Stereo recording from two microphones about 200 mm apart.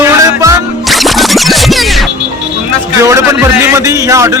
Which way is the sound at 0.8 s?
Centre (ahead or behind).